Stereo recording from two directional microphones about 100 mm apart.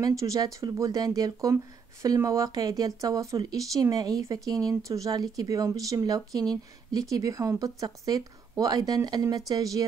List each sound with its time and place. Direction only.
0.0 s speech: 35° right (ahead or behind)